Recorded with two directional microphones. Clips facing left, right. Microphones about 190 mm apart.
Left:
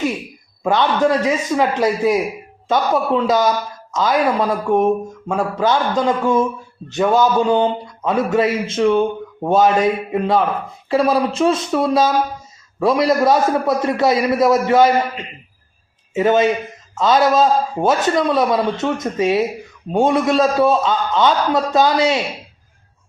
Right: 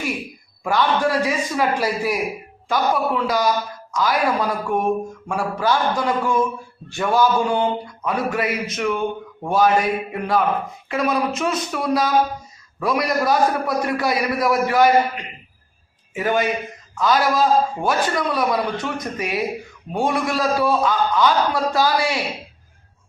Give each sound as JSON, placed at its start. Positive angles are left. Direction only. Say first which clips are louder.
{"t": 0.6, "sound": "a man's voice", "louder": "left 3 dB", "side_deg": 25}